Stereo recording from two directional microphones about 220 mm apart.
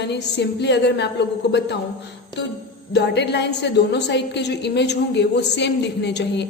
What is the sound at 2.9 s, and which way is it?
A woman's voice, 50° left (ahead or behind).